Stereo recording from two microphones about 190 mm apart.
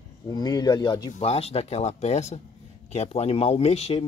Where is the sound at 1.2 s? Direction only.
30° left (ahead or behind).